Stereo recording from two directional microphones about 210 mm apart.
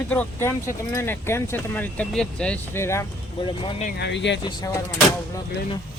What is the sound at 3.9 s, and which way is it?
Speech, 55° left (ahead or behind).